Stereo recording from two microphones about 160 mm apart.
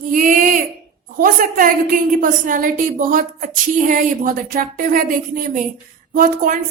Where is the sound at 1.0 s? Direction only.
60° right (ahead or behind).